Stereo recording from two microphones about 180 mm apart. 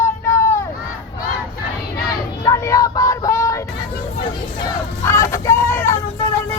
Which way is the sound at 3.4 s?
15° left (ahead or behind).